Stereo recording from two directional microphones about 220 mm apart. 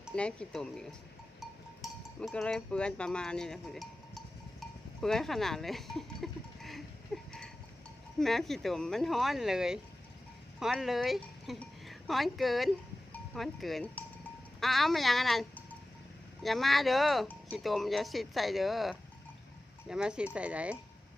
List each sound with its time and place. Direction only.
0.0 s speech: 5° left (ahead or behind)
7.1 s livestock: centre (ahead or behind)
8.2 s speech: centre (ahead or behind)